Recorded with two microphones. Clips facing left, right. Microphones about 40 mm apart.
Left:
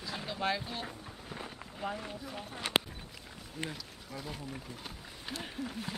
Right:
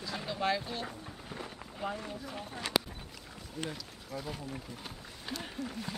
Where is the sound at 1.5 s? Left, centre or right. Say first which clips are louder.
Even; centre.